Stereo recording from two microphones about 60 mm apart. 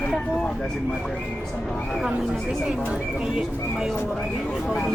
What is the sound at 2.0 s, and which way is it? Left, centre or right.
Speech, centre.